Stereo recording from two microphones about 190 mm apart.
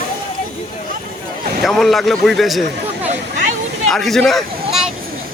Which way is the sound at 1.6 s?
Centre (ahead or behind).